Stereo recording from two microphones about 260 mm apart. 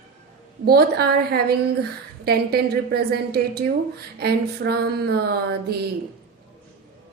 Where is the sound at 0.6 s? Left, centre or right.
Right.